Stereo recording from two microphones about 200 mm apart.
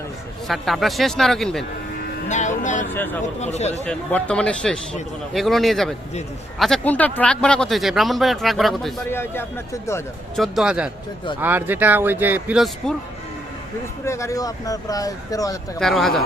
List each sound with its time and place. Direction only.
0.4 s speech: centre (ahead or behind)
2.3 s speech: 40° left (ahead or behind)
2.9 s speech: 10° left (ahead or behind)
3.4 s speech: 35° left (ahead or behind)
3.8 s speech: 5° left (ahead or behind)
9.0 s speech: 10° left (ahead or behind)
10.3 s speech: centre (ahead or behind)
14.0 s speech: 15° left (ahead or behind)
15.8 s speech: centre (ahead or behind)